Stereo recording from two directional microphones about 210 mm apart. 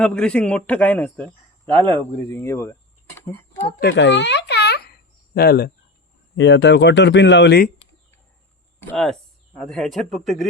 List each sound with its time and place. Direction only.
0.0 s a man's voice: 5° left (ahead or behind)
3.5 s speech: 30° left (ahead or behind)
3.8 s a child's voice: 55° left (ahead or behind)
8.8 s speech: 5° left (ahead or behind)